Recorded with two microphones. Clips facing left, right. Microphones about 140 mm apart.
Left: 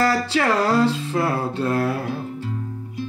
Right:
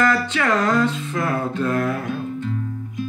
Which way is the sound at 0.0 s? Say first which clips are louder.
Even; 35° left (ahead or behind).